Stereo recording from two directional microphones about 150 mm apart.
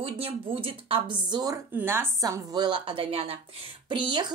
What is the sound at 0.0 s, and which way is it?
Speech, 35° right (ahead or behind).